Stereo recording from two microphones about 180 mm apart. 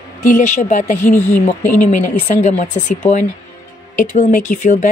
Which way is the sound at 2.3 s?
40° left (ahead or behind).